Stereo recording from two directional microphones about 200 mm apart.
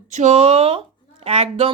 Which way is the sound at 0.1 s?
35° right (ahead or behind).